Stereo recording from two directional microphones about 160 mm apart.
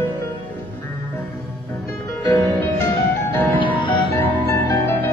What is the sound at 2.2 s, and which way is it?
Music, 20° left (ahead or behind).